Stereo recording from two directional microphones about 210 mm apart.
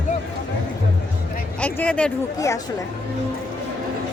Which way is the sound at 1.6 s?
5° left (ahead or behind).